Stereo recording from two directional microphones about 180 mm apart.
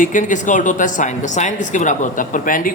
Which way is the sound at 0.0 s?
45° left (ahead or behind).